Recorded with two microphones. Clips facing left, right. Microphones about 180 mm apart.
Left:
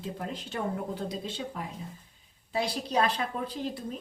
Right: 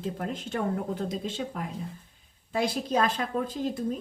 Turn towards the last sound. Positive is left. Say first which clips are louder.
# right 5 dB
turn(degrees=-45)  # may be behind; listen again after turning